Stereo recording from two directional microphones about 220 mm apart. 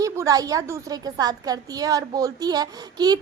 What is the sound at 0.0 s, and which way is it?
A woman's voice, 15° right (ahead or behind).